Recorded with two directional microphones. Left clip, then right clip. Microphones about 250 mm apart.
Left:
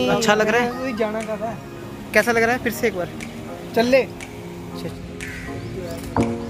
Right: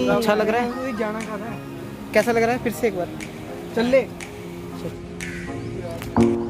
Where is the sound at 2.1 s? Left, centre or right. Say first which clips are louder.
Left 1 dB; centre.